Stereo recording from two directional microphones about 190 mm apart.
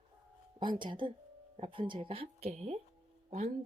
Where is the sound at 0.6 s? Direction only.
25° right (ahead or behind).